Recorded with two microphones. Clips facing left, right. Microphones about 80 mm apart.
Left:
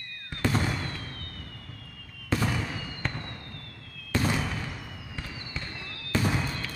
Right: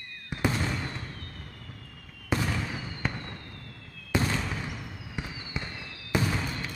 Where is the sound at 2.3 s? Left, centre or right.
Centre.